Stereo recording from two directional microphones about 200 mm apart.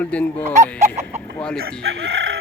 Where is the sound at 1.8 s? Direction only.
80° right.